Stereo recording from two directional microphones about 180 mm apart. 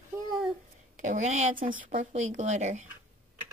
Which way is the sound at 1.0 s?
40° right (ahead or behind).